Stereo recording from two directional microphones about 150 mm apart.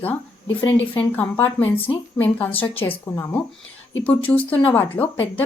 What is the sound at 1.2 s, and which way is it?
A woman's voice, 15° left (ahead or behind).